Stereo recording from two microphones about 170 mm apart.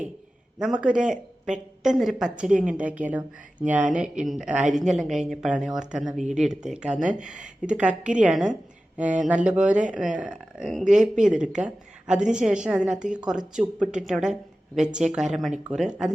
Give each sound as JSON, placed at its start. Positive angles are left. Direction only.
{"t": 0.6, "sound": "a woman's voice", "side_deg": -5}
{"t": 10.9, "sound": "speech", "side_deg": -45}
{"t": 11.3, "sound": "a woman's voice", "side_deg": -5}